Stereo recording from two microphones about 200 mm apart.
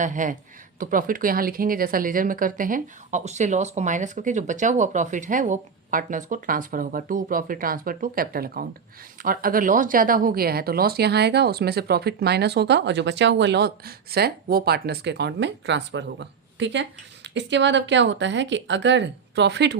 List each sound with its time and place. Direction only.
0.0 s speech: 40° right (ahead or behind); by 19.8 s 60° right (ahead or behind)